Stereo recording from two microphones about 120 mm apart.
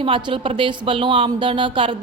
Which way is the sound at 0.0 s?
45° right (ahead or behind).